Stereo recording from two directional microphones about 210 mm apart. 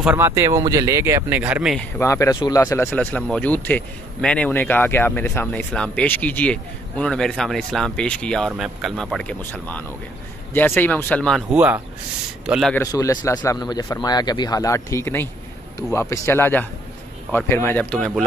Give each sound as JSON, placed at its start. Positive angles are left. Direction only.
{"t": 0.0, "sound": "speech", "side_deg": -10}
{"t": 2.0, "sound": "speech", "side_deg": 15}
{"t": 12.7, "sound": "speech", "side_deg": 15}